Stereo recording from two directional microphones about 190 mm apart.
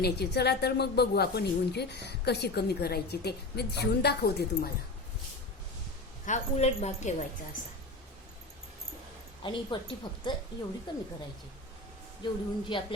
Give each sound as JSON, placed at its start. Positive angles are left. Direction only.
{"t": 0.0, "sound": "a woman's voice", "side_deg": 60}
{"t": 6.2, "sound": "a woman's voice", "side_deg": 35}
{"t": 9.4, "sound": "a woman's voice", "side_deg": 25}
{"t": 12.2, "sound": "a woman's voice", "side_deg": 25}